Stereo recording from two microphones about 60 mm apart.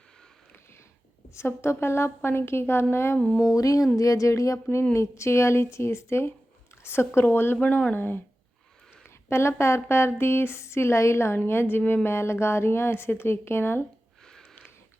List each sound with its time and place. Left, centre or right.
1.3 s speech: left
3.5 s speech: left
9.0 s speech: left